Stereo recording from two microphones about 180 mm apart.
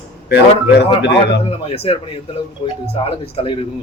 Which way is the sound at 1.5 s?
35° left (ahead or behind).